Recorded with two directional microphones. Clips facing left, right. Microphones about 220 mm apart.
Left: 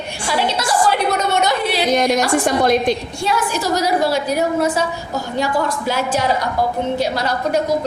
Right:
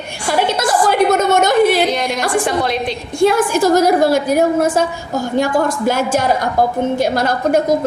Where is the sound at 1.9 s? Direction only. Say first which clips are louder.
Left 3 dB; 45° left (ahead or behind).